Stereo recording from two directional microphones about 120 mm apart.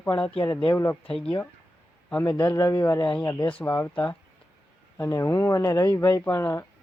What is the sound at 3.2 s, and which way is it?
Speech, 35° left (ahead or behind).